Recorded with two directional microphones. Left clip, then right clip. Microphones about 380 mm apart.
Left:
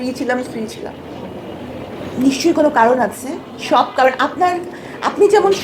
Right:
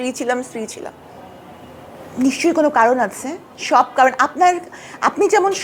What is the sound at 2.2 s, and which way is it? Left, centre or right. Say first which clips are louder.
Speech: left 2 dB; right.